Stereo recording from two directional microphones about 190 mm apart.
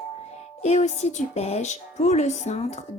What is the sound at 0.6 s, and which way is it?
Speech, 35° left (ahead or behind).